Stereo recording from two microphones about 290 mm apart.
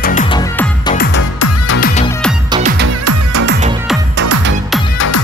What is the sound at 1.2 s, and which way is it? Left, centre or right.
Music, left.